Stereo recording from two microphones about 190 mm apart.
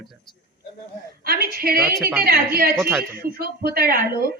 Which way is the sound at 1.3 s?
50° right (ahead or behind).